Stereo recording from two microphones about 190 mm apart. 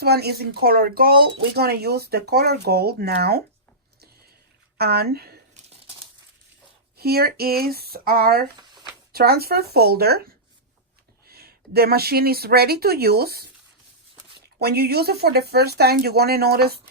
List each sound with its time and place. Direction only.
0.0 s speech: 55° right (ahead or behind)
4.8 s speech: 55° right (ahead or behind)
6.9 s speech: 55° right (ahead or behind)
14.6 s speech: 55° right (ahead or behind)